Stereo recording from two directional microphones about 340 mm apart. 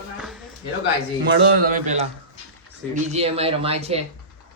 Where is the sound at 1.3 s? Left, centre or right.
Right.